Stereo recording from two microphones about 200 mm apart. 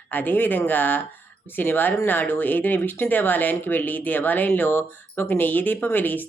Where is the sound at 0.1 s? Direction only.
10° left (ahead or behind).